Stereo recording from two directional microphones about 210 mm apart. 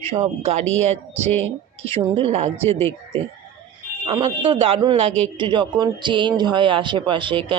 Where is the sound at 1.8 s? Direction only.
25° right (ahead or behind).